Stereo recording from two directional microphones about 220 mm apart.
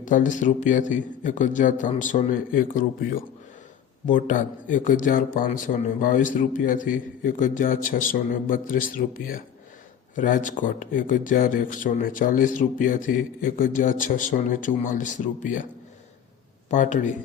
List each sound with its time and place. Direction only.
0.0 s speech: 35° left (ahead or behind)
16.6 s speech: 35° left (ahead or behind)